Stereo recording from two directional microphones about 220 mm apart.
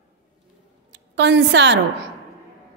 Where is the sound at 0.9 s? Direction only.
55° right (ahead or behind).